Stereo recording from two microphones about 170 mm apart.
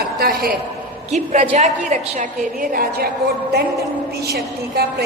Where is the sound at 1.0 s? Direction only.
40° right (ahead or behind); by 3.1 s 60° right (ahead or behind).